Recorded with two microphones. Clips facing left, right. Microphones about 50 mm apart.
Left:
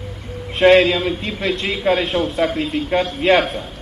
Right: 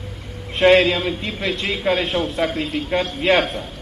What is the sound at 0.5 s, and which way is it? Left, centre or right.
A man's voice, centre.